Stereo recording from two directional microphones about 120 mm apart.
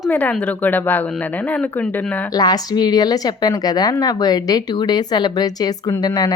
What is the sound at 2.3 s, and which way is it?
A woman's voice, 35° left (ahead or behind).